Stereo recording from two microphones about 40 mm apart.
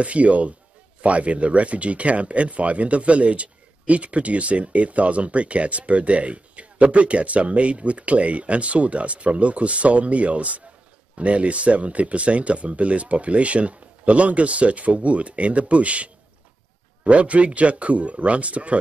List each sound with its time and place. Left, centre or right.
0.0 s speech: right